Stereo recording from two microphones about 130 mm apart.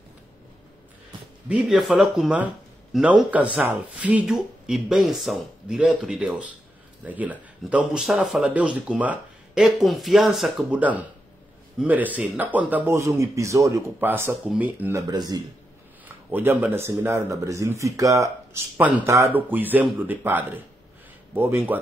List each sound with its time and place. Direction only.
1.5 s speech: centre (ahead or behind)
15.0 s speech: 30° right (ahead or behind)
16.1 s speech: 15° right (ahead or behind)
18.8 s speech: 10° right (ahead or behind)
19.0 s speech: 20° right (ahead or behind)